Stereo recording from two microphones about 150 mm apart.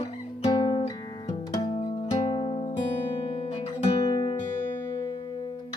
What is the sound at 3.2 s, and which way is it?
Guitar, 40° left (ahead or behind).